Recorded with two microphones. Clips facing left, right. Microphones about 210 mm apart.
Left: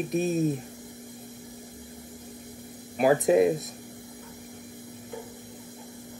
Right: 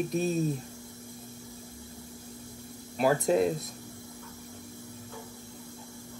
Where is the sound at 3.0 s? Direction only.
15° left (ahead or behind).